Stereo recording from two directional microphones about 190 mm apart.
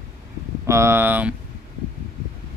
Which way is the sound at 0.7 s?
15° right (ahead or behind).